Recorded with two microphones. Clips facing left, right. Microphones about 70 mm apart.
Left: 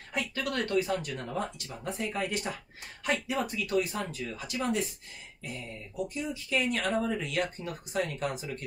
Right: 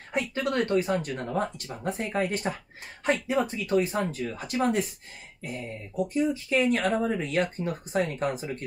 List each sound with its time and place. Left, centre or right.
0.1 s speech: right